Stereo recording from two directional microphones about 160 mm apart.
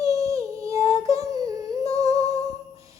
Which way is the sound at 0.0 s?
20° right (ahead or behind).